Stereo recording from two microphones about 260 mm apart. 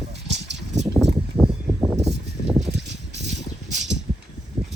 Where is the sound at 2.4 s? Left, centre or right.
Left.